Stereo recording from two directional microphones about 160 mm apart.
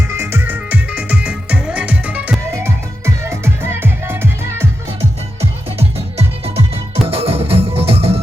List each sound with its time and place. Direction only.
0.1 s music: 15° right (ahead or behind)
6.9 s music: 35° right (ahead or behind)